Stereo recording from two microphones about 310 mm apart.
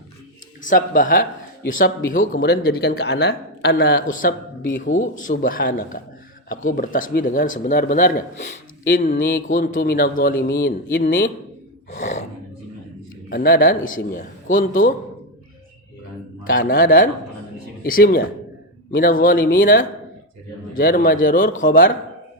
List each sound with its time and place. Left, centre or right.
0.6 s speech: left
4.6 s speech: left
4.9 s speech: left
11.9 s gasp: left
13.3 s speech: left
16.4 s a man's voice: left